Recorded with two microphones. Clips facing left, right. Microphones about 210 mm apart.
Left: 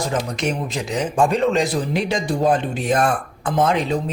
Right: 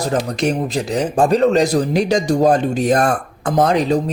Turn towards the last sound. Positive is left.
turn(degrees=-40)  # may be behind; listen again after turning